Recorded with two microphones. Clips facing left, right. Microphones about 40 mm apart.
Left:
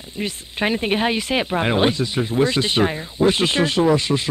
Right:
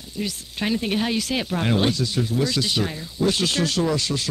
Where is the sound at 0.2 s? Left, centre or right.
Left.